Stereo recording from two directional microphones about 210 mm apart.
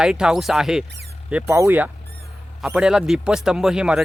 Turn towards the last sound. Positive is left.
turn(degrees=-5)  # may be behind; listen again after turning